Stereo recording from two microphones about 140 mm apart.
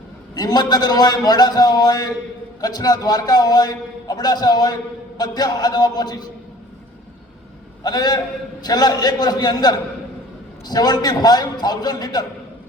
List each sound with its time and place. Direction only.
0.3 s a man's voice: 30° left (ahead or behind)
7.9 s a man's voice: 30° left (ahead or behind)